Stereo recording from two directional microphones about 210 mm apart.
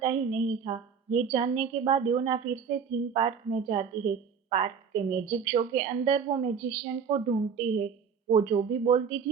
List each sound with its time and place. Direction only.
0.0 s a woman's voice: 30° right (ahead or behind)